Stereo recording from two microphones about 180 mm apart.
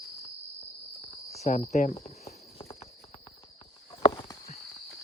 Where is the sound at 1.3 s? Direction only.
40° left (ahead or behind).